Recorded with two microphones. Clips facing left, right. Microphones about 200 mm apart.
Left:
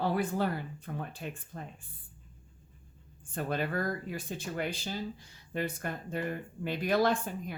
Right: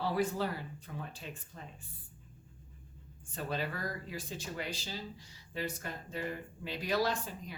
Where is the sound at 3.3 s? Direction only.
55° left (ahead or behind).